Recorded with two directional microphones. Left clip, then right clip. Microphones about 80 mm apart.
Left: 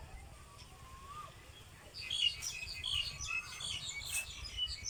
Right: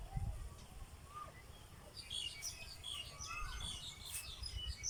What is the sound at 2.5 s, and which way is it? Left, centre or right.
Bird, right.